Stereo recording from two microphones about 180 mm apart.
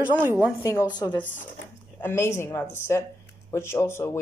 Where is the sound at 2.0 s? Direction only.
15° left (ahead or behind).